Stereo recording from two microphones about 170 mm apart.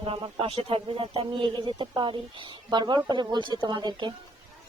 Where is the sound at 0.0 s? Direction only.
30° right (ahead or behind).